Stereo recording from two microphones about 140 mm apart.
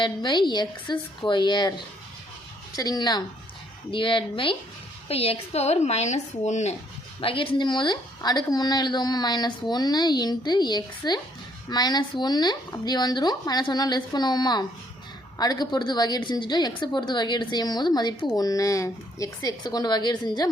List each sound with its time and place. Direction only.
0.0 s a woman's voice: 35° left (ahead or behind)
2.7 s a woman's voice: 30° left (ahead or behind); by 6.7 s 55° left (ahead or behind)
7.2 s a woman's voice: 40° left (ahead or behind)